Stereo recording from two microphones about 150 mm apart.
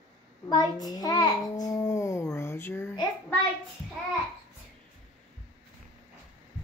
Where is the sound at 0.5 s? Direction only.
25° left (ahead or behind).